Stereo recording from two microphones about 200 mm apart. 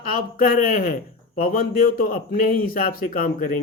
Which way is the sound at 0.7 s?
45° left (ahead or behind).